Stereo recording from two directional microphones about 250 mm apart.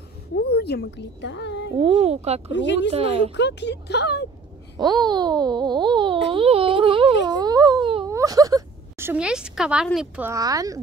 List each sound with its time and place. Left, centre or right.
0.4 s speech: left
1.8 s speech: right
2.5 s speech: left
2.9 s speech: right
3.3 s speech: left
4.7 s speech: centre
7.2 s wail: centre